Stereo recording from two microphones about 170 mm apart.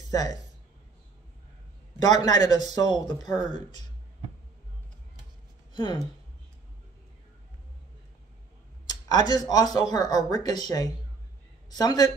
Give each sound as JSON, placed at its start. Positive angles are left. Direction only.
{"t": 0.1, "sound": "speech", "side_deg": 20}
{"t": 2.0, "sound": "speech", "side_deg": 25}
{"t": 5.7, "sound": "speech", "side_deg": 25}
{"t": 8.8, "sound": "speech", "side_deg": 25}